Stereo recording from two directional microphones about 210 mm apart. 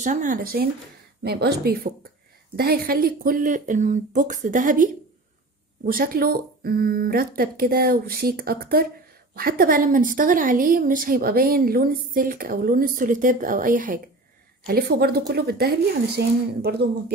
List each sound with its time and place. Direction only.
0.0 s a woman's voice: 40° right (ahead or behind)
5.9 s a woman's voice: 45° right (ahead or behind)